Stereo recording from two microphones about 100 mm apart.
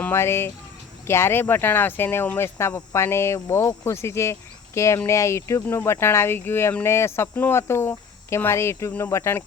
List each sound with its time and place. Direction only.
0.1 s speech: 25° left (ahead or behind)